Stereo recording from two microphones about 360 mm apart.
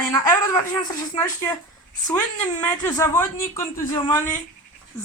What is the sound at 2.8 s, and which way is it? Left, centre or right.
A woman's voice, centre.